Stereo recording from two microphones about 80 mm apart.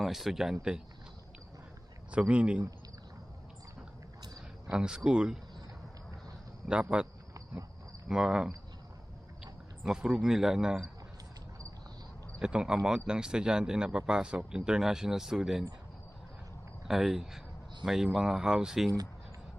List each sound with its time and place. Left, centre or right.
0.0 s speech: centre
2.0 s speech: centre
4.6 s speech: centre
6.9 s a man's voice: centre
12.4 s speech: centre
16.9 s speech: centre